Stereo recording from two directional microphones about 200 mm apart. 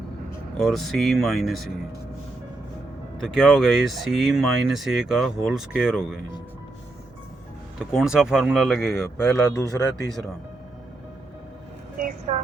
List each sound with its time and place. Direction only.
0.3 s speech: 5° left (ahead or behind)
3.2 s speech: centre (ahead or behind)
7.8 s speech: centre (ahead or behind)
11.9 s a sound: 45° right (ahead or behind)